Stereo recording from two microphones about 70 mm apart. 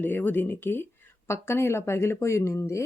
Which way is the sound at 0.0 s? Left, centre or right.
Left.